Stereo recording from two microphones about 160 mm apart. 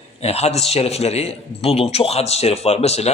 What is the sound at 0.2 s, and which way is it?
A man's voice, 40° left (ahead or behind).